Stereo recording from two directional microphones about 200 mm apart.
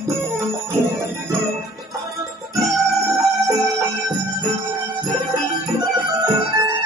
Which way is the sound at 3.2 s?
20° right (ahead or behind).